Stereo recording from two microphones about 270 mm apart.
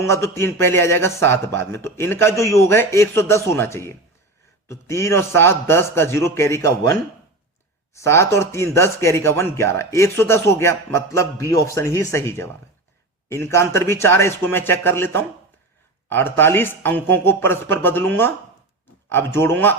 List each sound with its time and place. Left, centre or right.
0.0 s a man's voice: centre
7.9 s a man's voice: centre